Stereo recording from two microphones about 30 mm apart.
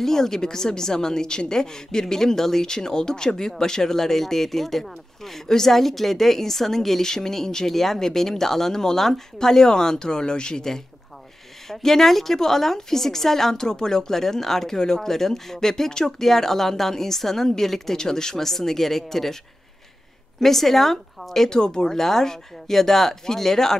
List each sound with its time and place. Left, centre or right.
0.0 s a woman's voice: centre
11.7 s a woman's voice: centre
16.1 s a woman's voice: centre
20.3 s a woman's voice: centre
21.5 s speech: left
21.9 s a woman's voice: centre